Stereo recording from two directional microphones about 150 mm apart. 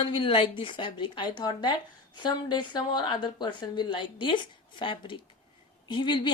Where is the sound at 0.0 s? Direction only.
35° left (ahead or behind).